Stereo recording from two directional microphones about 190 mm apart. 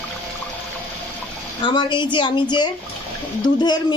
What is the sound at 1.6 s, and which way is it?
Speech, 25° left (ahead or behind).